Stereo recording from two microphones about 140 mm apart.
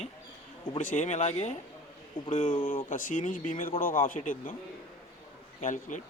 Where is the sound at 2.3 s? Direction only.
70° left (ahead or behind).